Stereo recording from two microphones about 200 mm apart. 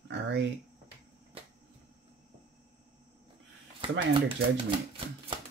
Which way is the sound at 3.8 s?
25° right (ahead or behind).